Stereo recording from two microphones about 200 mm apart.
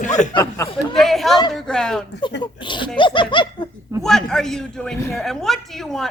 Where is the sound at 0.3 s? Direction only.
15° left (ahead or behind).